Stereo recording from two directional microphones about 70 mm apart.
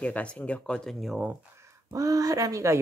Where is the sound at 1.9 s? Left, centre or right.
Right.